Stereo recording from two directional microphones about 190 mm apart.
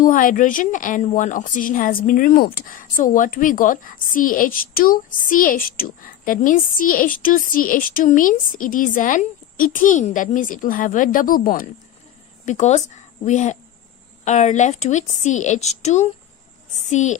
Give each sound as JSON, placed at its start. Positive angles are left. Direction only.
{"t": 0.0, "sound": "a woman's voice", "side_deg": 45}